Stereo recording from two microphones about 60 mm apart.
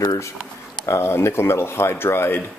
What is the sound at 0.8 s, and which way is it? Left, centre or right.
Speech, left.